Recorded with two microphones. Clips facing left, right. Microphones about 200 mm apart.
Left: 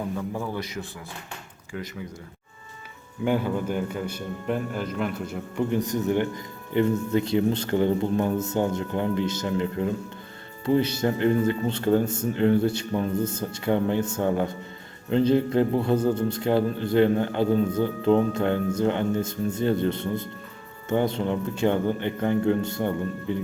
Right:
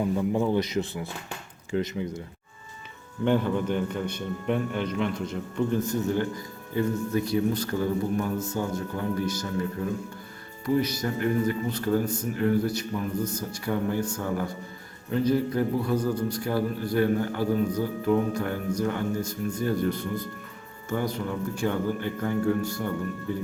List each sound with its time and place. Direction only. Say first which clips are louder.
0.2 s a man's voice: right 6 dB; 20° right (ahead or behind)
3.2 s a man's voice: right 1 dB; 5° left (ahead or behind); by 22.9 s 25° left (ahead or behind)